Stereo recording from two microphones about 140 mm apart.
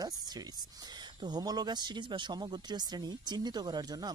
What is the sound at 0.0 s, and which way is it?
Speech, 30° right (ahead or behind).